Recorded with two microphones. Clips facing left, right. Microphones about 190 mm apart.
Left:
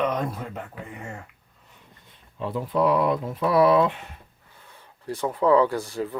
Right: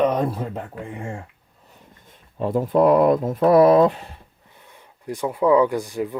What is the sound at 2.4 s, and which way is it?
Speech, 45° right (ahead or behind).